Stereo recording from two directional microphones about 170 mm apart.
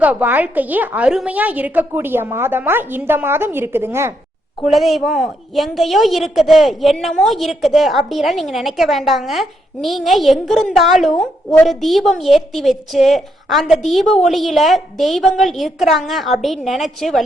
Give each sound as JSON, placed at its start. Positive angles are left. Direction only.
{"t": 0.0, "sound": "a woman's voice", "side_deg": -10}
{"t": 4.7, "sound": "a woman's voice", "side_deg": 0}